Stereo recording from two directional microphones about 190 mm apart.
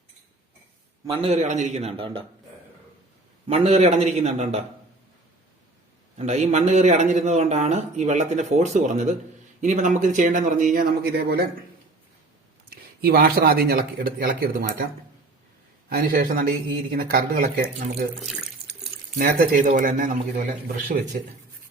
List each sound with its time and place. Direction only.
1.0 s speech: 30° right (ahead or behind)
3.4 s speech: 35° right (ahead or behind)
6.1 s speech: 35° right (ahead or behind); by 11.4 s 50° right (ahead or behind)
12.7 s speech: 50° right (ahead or behind)
15.9 s speech: 50° right (ahead or behind)
18.2 s water tap: centre (ahead or behind)
19.2 s speech: 45° right (ahead or behind)